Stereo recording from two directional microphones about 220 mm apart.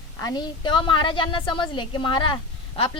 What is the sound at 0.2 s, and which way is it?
A woman's voice, 15° left (ahead or behind).